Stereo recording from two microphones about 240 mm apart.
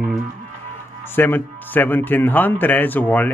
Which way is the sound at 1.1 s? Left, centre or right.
Centre.